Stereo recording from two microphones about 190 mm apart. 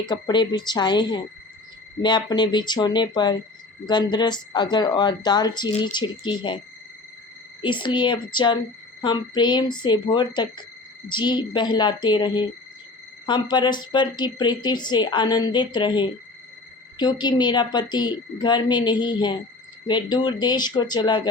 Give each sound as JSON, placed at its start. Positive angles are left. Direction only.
{"t": 0.0, "sound": "speech", "side_deg": 25}
{"t": 7.6, "sound": "speech", "side_deg": 25}